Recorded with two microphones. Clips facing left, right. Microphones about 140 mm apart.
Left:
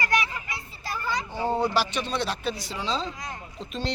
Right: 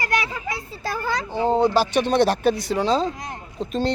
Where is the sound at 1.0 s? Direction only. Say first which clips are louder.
Right 3 dB; 90° right.